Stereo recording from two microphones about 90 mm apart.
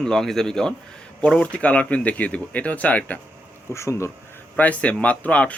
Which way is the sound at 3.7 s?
30° left (ahead or behind).